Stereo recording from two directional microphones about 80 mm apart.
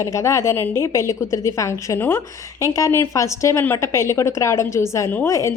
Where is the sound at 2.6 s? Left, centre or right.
Left.